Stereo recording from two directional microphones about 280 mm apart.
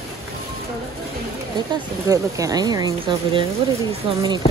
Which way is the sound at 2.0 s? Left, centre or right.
Centre.